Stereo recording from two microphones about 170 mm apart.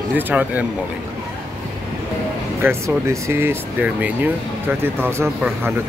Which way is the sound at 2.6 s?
15° right (ahead or behind).